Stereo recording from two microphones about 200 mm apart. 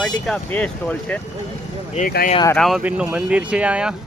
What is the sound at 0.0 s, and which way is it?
Speech, 5° left (ahead or behind).